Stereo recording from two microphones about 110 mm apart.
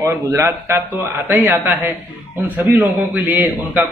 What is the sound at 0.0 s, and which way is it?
Speech, 25° right (ahead or behind).